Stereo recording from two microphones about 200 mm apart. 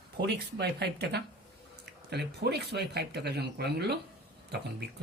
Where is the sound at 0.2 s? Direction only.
55° right (ahead or behind).